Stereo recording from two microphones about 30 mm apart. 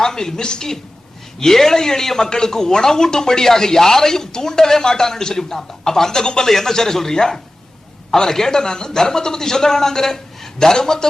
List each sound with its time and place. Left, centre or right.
0.0 s a man's voice: centre
1.4 s a man's voice: centre